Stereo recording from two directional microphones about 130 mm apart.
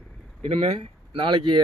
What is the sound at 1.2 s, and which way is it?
Speech, 35° right (ahead or behind).